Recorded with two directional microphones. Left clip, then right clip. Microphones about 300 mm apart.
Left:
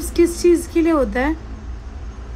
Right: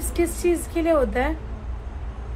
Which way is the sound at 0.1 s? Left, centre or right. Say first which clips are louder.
Left 8 dB; centre.